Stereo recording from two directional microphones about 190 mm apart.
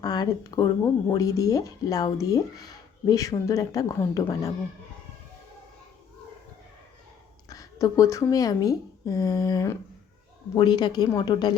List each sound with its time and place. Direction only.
0.0 s speech: 20° left (ahead or behind)
7.4 s a woman's voice: 20° left (ahead or behind)